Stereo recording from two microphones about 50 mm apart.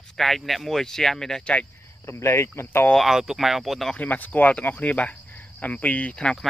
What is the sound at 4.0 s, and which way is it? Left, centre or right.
Speech, left.